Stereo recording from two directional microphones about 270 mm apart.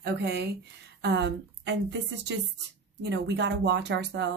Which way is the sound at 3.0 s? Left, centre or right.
Right.